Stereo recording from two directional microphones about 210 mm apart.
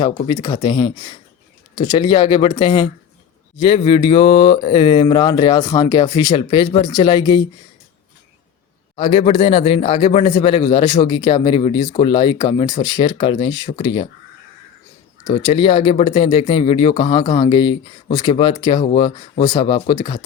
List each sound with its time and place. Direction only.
0.0 s a man's voice: 20° left (ahead or behind)
9.0 s a man's voice: 25° left (ahead or behind)
15.3 s a man's voice: 25° left (ahead or behind)